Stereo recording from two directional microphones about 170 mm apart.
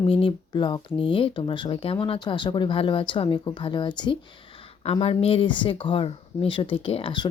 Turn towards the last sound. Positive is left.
turn(degrees=30)  # may be behind; listen again after turning